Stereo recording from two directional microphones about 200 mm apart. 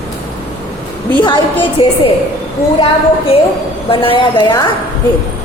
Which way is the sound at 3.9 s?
25° left (ahead or behind).